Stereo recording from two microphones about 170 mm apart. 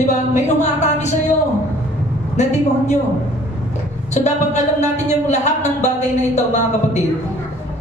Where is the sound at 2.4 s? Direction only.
45° left (ahead or behind).